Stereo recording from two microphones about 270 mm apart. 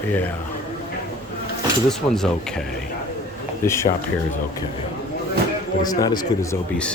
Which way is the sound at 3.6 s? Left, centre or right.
Centre.